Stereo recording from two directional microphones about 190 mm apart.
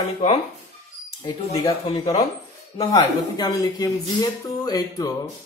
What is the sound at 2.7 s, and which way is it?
Speech, 20° left (ahead or behind).